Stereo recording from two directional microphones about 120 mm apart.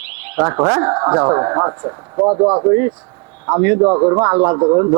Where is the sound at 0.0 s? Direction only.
20° right (ahead or behind); by 4.9 s 35° right (ahead or behind).